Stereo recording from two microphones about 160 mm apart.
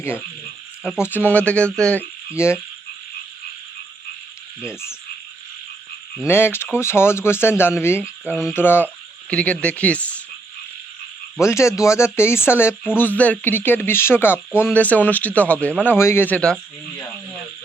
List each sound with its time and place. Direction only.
0.9 s speech: 15° left (ahead or behind)
6.2 s speech: 15° left (ahead or behind)
11.3 s speech: 15° left (ahead or behind)